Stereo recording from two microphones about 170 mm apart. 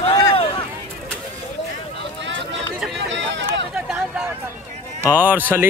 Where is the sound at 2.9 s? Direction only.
90° right.